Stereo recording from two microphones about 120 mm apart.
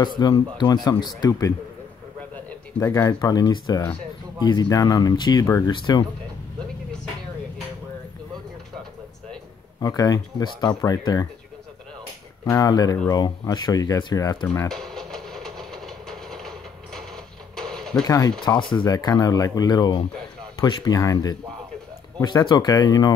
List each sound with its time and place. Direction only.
0.0 s speech: 35° left (ahead or behind)
2.8 s speech: 30° left (ahead or behind)
9.8 s speech: 30° left (ahead or behind)
12.4 s speech: 30° left (ahead or behind)
14.7 s train: centre (ahead or behind)
17.6 s mechanisms: 5° left (ahead or behind)
18.0 s speech: 30° left (ahead or behind)